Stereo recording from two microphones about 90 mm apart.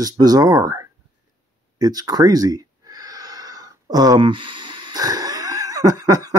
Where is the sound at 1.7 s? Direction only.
45° right (ahead or behind).